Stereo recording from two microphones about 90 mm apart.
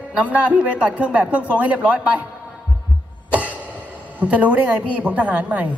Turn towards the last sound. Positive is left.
turn(degrees=-15)  # may be behind; listen again after turning